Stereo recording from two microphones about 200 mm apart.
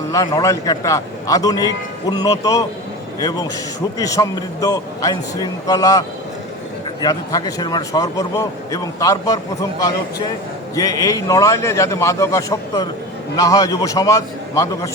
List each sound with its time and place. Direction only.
0.1 s a man's voice: 20° left (ahead or behind)